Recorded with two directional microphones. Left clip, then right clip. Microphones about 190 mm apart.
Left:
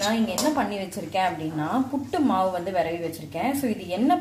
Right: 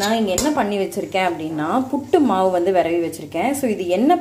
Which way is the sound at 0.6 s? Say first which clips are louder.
Right 7 dB; 30° right (ahead or behind).